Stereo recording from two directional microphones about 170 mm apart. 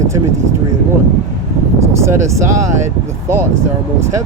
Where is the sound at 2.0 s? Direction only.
15° right (ahead or behind).